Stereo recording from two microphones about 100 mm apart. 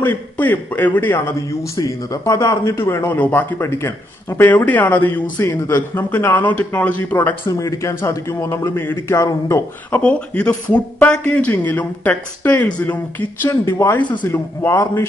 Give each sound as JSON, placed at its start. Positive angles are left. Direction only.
{"t": 0.0, "sound": "a man's voice", "side_deg": 15}
{"t": 9.8, "sound": "speech", "side_deg": 15}
{"t": 13.5, "sound": "a man's voice", "side_deg": 30}